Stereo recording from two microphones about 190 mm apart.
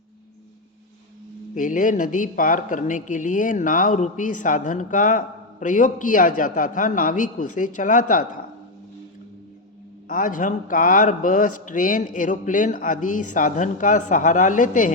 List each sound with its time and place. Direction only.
1.5 s a man's voice: 45° left (ahead or behind)
10.1 s a man's voice: 45° left (ahead or behind)